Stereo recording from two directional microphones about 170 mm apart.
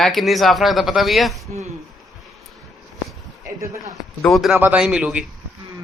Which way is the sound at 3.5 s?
20° right (ahead or behind).